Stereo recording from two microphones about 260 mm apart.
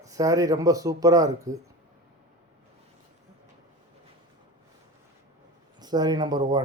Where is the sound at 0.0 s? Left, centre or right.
Centre.